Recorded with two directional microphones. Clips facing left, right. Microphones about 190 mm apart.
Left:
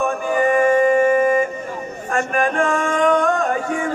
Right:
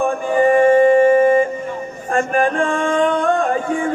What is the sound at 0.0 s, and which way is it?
Music, 30° right (ahead or behind).